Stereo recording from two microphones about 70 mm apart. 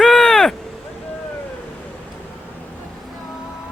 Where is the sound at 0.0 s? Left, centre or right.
Centre.